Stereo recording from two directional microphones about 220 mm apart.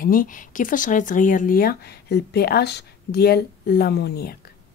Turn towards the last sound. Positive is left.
turn(degrees=45)  # may be behind; listen again after turning